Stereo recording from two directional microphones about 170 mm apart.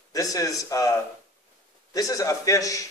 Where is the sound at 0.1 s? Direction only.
20° left (ahead or behind).